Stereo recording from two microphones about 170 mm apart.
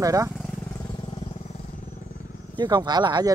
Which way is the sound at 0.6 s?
20° left (ahead or behind).